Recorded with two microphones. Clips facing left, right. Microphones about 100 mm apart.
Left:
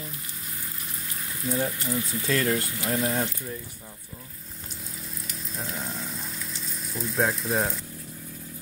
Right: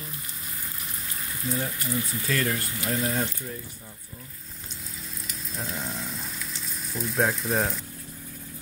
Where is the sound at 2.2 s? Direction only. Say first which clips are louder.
Left 5 dB; 25° left (ahead or behind).